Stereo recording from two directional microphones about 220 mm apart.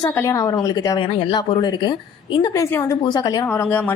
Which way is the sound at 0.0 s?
15° left (ahead or behind).